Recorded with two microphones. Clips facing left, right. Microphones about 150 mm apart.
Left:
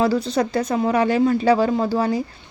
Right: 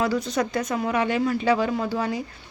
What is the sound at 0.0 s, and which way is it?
A woman's voice, 30° left (ahead or behind).